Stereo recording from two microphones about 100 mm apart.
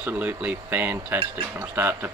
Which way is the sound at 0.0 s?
15° right (ahead or behind).